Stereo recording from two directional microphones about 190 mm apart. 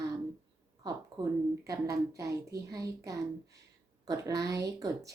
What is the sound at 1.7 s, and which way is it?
Speech, 15° right (ahead or behind).